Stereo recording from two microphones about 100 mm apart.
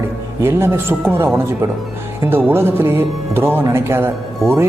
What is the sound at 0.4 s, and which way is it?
Speech, 25° right (ahead or behind).